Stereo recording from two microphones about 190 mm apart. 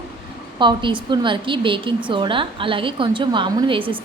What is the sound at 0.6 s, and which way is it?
A woman's voice, 25° right (ahead or behind).